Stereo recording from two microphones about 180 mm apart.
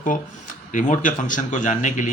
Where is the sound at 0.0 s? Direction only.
45° left (ahead or behind).